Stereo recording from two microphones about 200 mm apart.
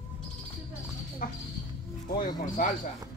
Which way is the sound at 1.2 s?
40° left (ahead or behind).